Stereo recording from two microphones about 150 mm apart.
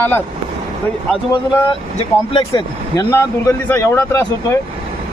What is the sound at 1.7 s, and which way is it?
Speech, 35° left (ahead or behind).